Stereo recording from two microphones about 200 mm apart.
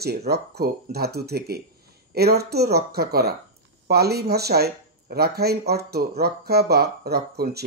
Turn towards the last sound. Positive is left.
turn(degrees=-55)  # may be behind; listen again after turning